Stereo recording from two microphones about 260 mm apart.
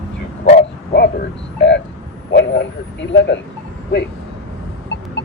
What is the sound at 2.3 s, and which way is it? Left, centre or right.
Speech, left.